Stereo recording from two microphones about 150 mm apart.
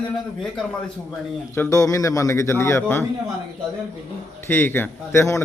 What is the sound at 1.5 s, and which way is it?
A man's voice, 20° left (ahead or behind).